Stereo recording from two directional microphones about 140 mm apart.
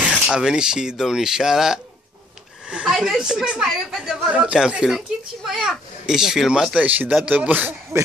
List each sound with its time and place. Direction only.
0.0 s a woman's voice: 5° right (ahead or behind)